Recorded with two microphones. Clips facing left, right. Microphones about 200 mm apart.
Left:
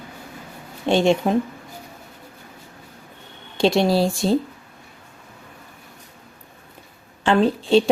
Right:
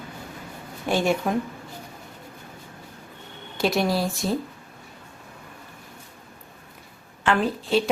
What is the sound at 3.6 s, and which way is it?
Speech, 25° left (ahead or behind).